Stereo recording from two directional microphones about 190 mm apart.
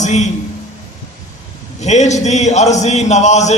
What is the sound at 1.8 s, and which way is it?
A man's voice, 35° left (ahead or behind).